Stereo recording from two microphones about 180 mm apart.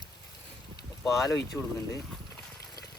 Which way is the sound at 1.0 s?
Centre (ahead or behind).